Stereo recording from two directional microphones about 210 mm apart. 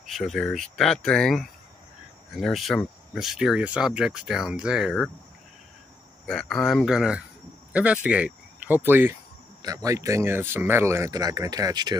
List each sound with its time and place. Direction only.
0.0 s speech: centre (ahead or behind)
6.2 s speech: centre (ahead or behind); by 12.0 s 20° right (ahead or behind)